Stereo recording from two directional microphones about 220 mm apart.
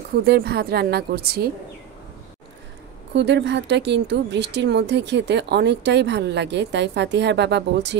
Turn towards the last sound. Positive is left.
turn(degrees=-50)  # may be behind; listen again after turning